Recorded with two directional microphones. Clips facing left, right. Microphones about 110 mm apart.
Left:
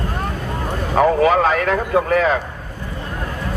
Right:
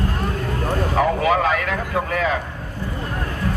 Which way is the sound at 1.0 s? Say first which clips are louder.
Left 5 dB; 40° left (ahead or behind).